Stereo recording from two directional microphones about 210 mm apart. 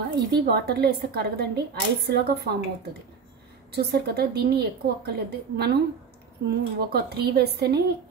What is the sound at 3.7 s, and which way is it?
A woman's voice, 50° right (ahead or behind).